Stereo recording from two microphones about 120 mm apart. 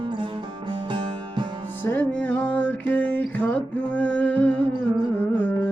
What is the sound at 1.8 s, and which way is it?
Music, 15° left (ahead or behind).